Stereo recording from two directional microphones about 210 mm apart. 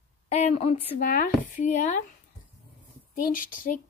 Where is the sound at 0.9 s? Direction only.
40° left (ahead or behind).